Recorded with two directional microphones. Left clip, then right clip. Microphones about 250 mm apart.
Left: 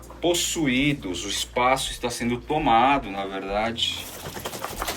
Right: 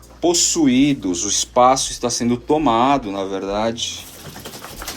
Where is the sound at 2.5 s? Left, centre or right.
Centre.